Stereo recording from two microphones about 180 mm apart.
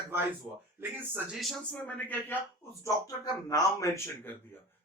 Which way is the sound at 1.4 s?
Centre (ahead or behind).